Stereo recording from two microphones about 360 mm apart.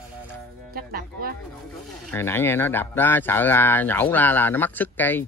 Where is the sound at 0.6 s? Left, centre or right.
Right.